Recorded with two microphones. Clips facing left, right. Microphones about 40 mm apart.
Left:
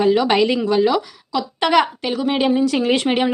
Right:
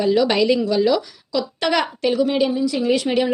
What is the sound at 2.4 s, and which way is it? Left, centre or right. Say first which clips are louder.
Speech: left 2 dB; left.